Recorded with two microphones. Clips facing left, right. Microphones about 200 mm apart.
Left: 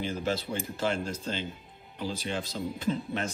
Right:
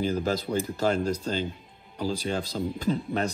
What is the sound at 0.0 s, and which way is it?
Speech, 40° right (ahead or behind).